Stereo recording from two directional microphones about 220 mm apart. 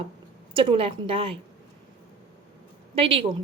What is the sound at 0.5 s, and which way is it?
Speech, 25° right (ahead or behind).